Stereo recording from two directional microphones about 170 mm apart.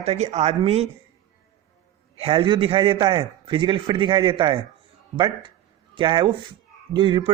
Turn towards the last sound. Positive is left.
turn(degrees=-30)  # may be behind; listen again after turning